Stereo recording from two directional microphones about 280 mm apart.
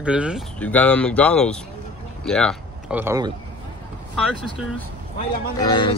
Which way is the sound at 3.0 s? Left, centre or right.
Centre.